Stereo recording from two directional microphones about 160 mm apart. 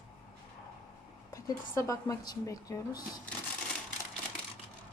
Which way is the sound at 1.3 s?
20° left (ahead or behind).